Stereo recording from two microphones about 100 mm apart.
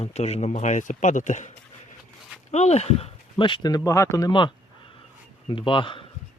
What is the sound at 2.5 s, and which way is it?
Speech, 90° left.